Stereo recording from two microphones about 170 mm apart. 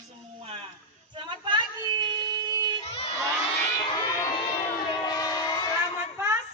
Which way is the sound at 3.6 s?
25° left (ahead or behind).